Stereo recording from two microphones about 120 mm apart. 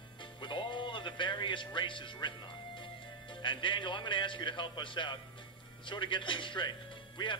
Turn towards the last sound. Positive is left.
turn(degrees=40)  # may be behind; listen again after turning